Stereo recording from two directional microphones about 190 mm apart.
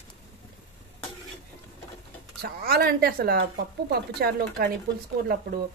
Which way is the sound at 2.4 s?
55° right (ahead or behind).